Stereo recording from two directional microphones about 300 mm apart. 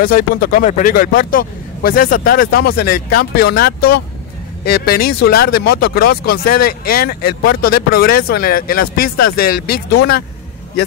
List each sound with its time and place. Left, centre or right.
0.0 s a man's voice: left